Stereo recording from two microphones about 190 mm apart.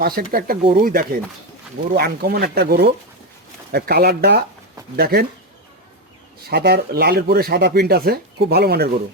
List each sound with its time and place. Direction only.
0.0 s speech: 50° right (ahead or behind)
6.5 s speech: 55° right (ahead or behind)